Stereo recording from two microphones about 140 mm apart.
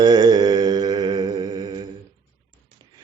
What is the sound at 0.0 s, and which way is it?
Mantra, 30° right (ahead or behind).